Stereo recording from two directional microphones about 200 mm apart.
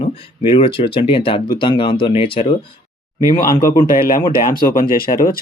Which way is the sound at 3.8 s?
45° left (ahead or behind).